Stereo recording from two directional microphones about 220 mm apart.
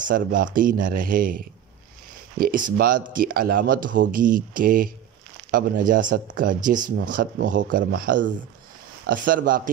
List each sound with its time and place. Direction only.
0.0 s speech: 40° right (ahead or behind)